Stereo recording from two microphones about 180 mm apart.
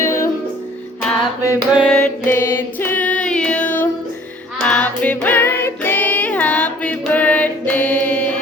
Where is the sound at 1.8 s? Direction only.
5° left (ahead or behind).